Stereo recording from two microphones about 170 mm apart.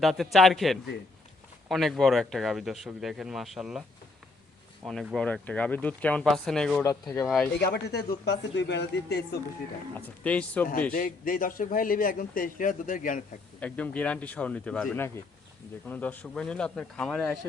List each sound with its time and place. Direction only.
0.0 s speech: centre (ahead or behind)
4.9 s speech: centre (ahead or behind)
6.8 s speech: 15° left (ahead or behind)
7.3 s speech: 5° left (ahead or behind)
7.6 s speech: 70° left (ahead or behind)
10.0 s speech: 10° left (ahead or behind)
10.9 s speech: 55° left (ahead or behind)
13.6 s speech: 10° left (ahead or behind)